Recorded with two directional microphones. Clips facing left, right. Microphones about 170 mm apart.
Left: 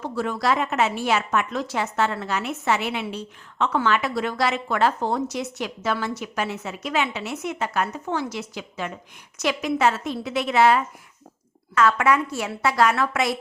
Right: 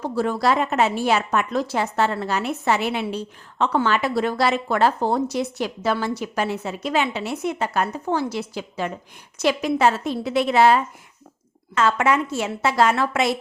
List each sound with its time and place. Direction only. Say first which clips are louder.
0.0 s a woman's voice: right 4 dB; 35° right (ahead or behind)